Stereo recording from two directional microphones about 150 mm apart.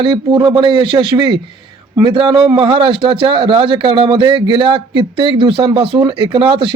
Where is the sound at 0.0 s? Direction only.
30° right (ahead or behind).